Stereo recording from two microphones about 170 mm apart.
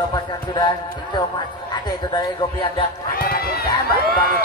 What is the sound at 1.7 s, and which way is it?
Speech, 25° left (ahead or behind).